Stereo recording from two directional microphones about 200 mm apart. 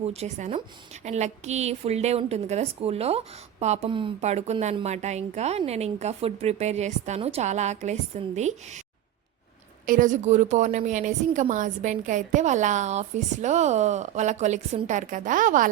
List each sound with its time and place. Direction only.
0.0 s a woman's voice: 30° right (ahead or behind)
9.8 s a woman's voice: 40° right (ahead or behind)